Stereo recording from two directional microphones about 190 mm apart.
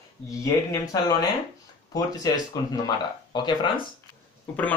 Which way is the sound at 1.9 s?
20° left (ahead or behind).